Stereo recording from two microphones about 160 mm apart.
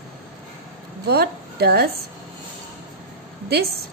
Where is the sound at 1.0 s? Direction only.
80° right.